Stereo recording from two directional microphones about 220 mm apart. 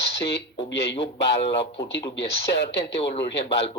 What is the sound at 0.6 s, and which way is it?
Speech, 55° left (ahead or behind).